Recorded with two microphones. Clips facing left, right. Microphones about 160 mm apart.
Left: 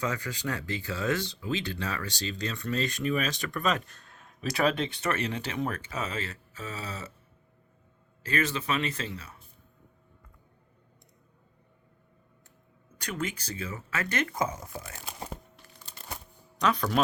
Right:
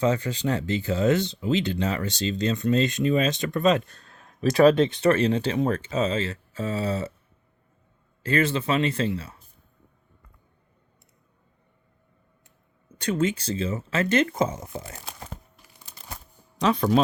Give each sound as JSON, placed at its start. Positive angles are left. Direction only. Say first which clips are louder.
{"t": 0.0, "sound": "speech", "louder": "right 8 dB", "side_deg": -25}
{"t": 8.2, "sound": "speech", "louder": "right 6 dB", "side_deg": -30}
{"t": 13.0, "sound": "speech", "louder": "right 10 dB", "side_deg": -25}
{"t": 16.6, "sound": "speech", "louder": "right 6 dB", "side_deg": -30}